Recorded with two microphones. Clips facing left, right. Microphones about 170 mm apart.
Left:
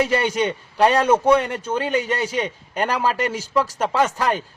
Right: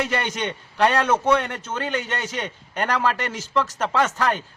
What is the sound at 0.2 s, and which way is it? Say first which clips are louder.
A man's voice: left 6 dB; 10° left (ahead or behind).